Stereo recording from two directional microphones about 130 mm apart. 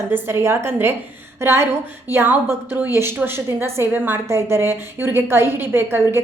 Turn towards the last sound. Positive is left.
turn(degrees=-20)  # may be behind; listen again after turning